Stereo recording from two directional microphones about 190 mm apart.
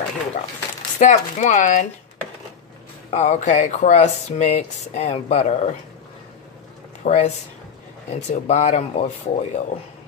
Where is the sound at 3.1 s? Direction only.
35° left (ahead or behind).